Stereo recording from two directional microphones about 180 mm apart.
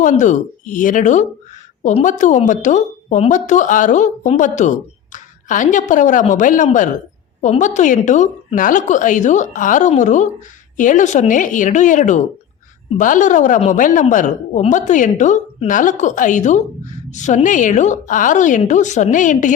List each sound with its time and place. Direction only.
0.0 s a woman's voice: 45° left (ahead or behind)